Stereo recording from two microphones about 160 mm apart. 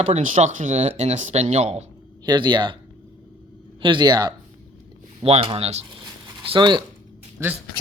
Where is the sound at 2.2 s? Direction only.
30° right (ahead or behind).